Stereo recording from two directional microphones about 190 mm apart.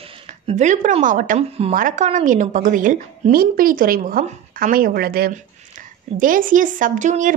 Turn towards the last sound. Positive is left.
turn(degrees=-40)  # may be behind; listen again after turning